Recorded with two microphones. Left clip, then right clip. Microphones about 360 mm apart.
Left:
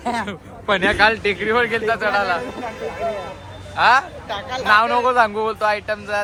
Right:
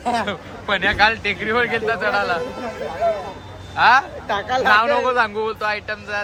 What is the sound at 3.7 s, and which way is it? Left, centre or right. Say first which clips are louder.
Speech: right 1 dB; centre.